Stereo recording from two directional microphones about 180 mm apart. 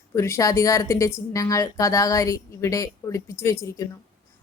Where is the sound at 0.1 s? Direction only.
15° left (ahead or behind).